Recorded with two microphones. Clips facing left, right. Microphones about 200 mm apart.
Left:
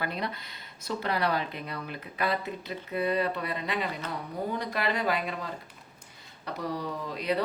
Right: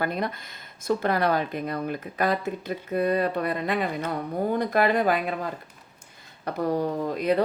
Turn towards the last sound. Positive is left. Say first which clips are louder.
# right 6 dB
turn(degrees=-50)  # may be behind; listen again after turning